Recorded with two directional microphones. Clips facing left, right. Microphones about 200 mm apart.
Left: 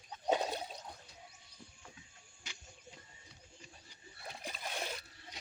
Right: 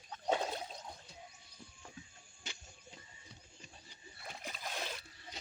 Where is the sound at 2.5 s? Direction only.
25° right (ahead or behind).